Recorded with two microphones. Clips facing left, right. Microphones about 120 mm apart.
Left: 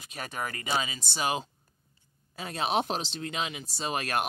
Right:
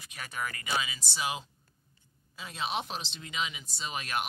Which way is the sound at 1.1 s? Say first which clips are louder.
Left 5 dB; 55° left (ahead or behind).